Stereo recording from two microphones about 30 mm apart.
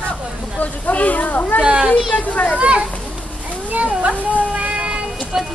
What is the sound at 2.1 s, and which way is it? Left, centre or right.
Speech, left.